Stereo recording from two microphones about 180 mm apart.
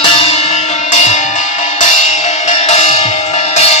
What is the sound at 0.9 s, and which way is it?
Music, 40° left (ahead or behind).